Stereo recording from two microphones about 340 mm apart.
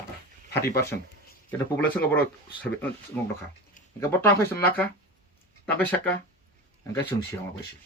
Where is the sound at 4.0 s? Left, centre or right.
Centre.